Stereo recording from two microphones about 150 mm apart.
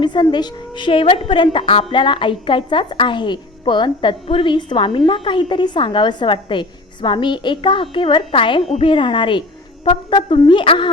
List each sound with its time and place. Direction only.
0.0 s a woman's voice: 30° left (ahead or behind)